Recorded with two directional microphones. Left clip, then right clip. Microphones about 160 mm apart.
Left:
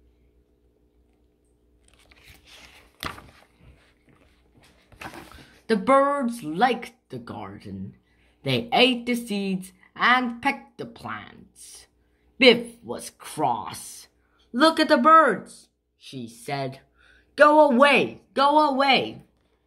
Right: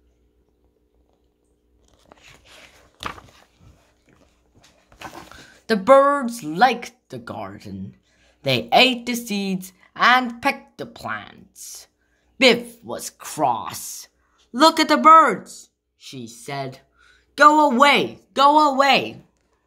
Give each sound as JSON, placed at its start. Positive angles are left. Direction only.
{"t": 4.8, "sound": "a woman's voice", "side_deg": -40}